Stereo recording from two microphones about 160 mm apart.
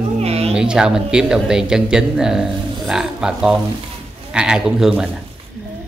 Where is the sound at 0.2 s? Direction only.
40° right (ahead or behind).